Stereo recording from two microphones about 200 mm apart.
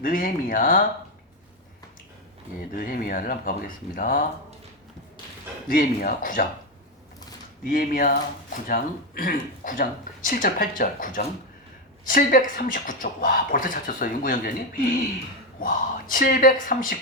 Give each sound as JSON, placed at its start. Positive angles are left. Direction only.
{"t": 0.0, "sound": "speech", "side_deg": 45}
{"t": 2.7, "sound": "speech", "side_deg": 45}
{"t": 5.6, "sound": "speech", "side_deg": 45}
{"t": 7.6, "sound": "speech", "side_deg": 45}